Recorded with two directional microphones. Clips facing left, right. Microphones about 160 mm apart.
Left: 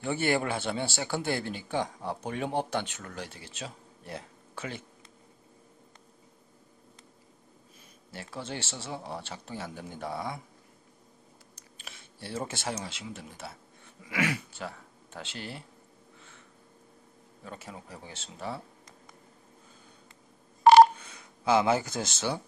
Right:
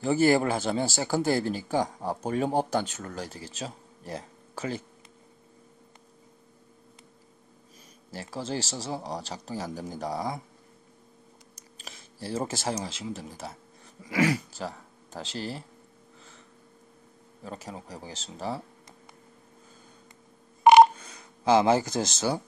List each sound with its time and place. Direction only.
0.0 s speech: 40° right (ahead or behind)
8.1 s speech: 35° right (ahead or behind)
11.8 s speech: 40° right (ahead or behind)
16.2 s snort: 35° right (ahead or behind)
17.5 s speech: 35° right (ahead or behind)
20.6 s telephone dialing: 20° right (ahead or behind)
20.9 s speech: 40° right (ahead or behind)